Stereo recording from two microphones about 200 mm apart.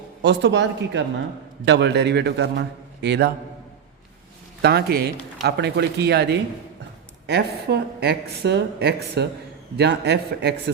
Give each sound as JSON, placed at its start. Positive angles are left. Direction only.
{"t": 0.2, "sound": "speech", "side_deg": -60}
{"t": 4.6, "sound": "speech", "side_deg": -55}